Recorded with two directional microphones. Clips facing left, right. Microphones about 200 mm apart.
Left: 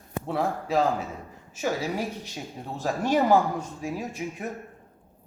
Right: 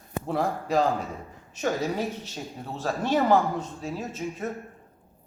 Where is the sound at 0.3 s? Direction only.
Centre (ahead or behind).